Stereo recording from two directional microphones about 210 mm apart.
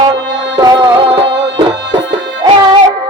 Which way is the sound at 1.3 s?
55° right (ahead or behind).